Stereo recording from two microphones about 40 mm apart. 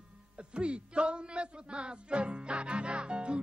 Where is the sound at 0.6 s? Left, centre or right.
Right.